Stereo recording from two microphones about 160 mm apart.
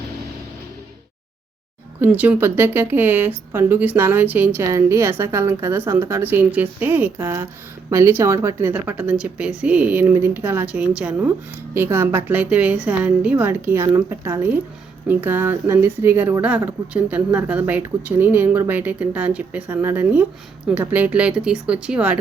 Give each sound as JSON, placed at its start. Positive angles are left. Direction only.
{"t": 2.0, "sound": "speech", "side_deg": -10}